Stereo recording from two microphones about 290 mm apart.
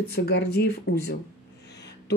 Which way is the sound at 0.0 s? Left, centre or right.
Left.